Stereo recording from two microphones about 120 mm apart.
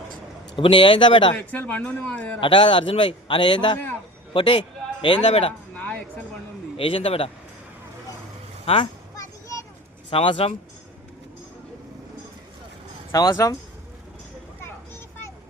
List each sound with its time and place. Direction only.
0.5 s a man's voice: 45° left (ahead or behind)
1.4 s speech: 15° left (ahead or behind)
2.4 s a man's voice: 45° left (ahead or behind)
5.7 s a sound: 15° left (ahead or behind)
6.7 s a man's voice: 50° left (ahead or behind)
8.6 s speech: 50° left (ahead or behind)
9.1 s a sound: 25° left (ahead or behind)
10.1 s a man's voice: 45° left (ahead or behind)
13.1 s speech: 30° left (ahead or behind)